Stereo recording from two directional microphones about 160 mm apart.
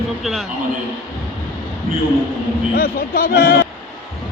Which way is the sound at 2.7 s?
70° left (ahead or behind).